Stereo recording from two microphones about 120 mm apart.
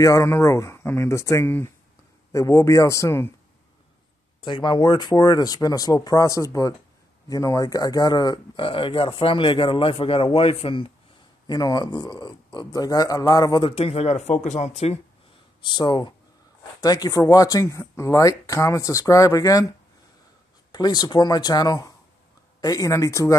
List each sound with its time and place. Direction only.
0.0 s speech: 25° left (ahead or behind)
4.4 s speech: 40° left (ahead or behind)
11.4 s speech: 35° left (ahead or behind)
13.7 s speech: 50° left (ahead or behind)
15.6 s speech: 40° left (ahead or behind)
20.7 s speech: 35° left (ahead or behind)